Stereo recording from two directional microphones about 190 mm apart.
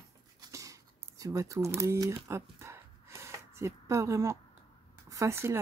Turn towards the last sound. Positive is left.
turn(degrees=-15)  # may be behind; listen again after turning